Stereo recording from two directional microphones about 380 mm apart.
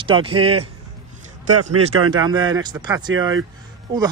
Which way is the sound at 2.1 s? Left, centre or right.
Centre.